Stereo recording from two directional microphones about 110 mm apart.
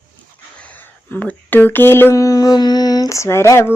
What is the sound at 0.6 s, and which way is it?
Speech, 15° left (ahead or behind).